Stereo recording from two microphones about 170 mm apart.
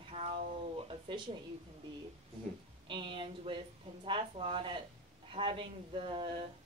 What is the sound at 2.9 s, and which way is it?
A woman's voice, 30° right (ahead or behind).